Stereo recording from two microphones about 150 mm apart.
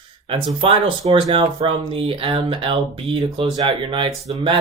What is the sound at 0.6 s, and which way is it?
Speech, 40° right (ahead or behind).